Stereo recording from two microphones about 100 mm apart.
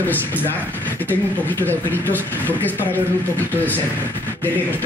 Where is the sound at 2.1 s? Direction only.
15° left (ahead or behind).